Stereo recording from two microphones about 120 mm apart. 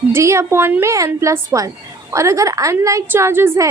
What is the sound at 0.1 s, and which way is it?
A woman's voice, 25° right (ahead or behind).